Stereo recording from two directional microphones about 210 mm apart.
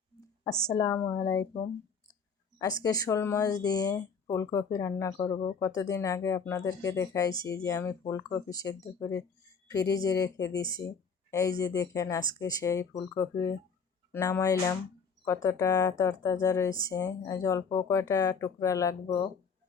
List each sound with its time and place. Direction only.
0.2 s speech: 15° left (ahead or behind)
2.6 s speech: 15° left (ahead or behind)